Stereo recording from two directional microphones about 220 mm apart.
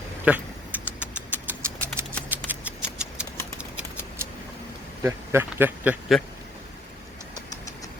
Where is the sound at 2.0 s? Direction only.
10° right (ahead or behind).